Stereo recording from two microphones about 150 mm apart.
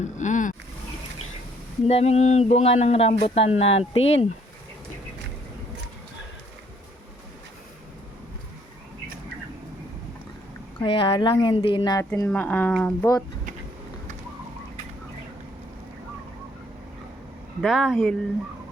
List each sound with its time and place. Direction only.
0.0 s boat: 55° left (ahead or behind)
1.9 s speech: 45° left (ahead or behind)
10.8 s speech: 35° left (ahead or behind)
11.8 s speech: 20° left (ahead or behind)
17.6 s speech: centre (ahead or behind)